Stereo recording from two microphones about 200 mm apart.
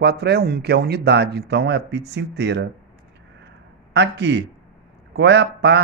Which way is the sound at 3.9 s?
60° right (ahead or behind).